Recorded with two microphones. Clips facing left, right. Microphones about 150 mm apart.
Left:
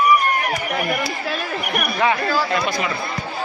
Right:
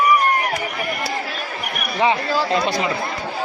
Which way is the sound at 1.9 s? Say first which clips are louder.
Right 2 dB; 25° right (ahead or behind).